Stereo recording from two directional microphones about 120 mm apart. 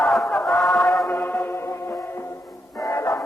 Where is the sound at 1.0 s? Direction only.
15° left (ahead or behind).